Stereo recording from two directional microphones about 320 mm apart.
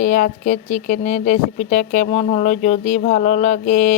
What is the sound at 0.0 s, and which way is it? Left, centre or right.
Speech, left.